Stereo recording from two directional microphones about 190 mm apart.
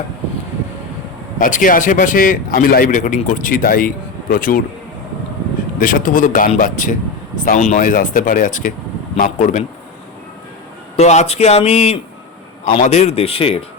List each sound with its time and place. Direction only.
1.4 s a man's voice: 45° left (ahead or behind)
5.8 s a man's voice: 45° left (ahead or behind)
10.9 s speech: 35° left (ahead or behind)